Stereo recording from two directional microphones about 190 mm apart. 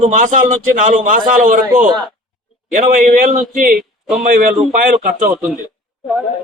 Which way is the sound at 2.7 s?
45° right (ahead or behind).